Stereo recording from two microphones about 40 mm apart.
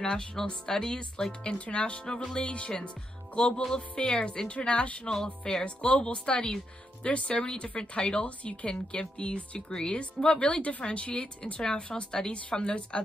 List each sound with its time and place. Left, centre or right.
0.0 s a woman's voice: centre
2.4 s a woman's voice: left
5.4 s a woman's voice: left
11.6 s a woman's voice: centre